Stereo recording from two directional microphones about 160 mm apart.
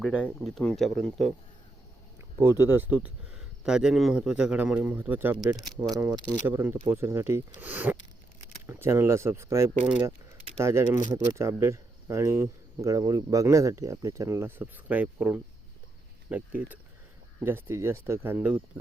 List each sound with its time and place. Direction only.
0.2 s speech: 5° left (ahead or behind)
2.4 s speech: 15° right (ahead or behind)